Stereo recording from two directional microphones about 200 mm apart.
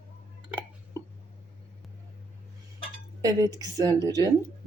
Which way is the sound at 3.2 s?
20° right (ahead or behind).